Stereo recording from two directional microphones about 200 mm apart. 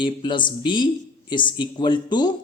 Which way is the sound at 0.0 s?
25° left (ahead or behind).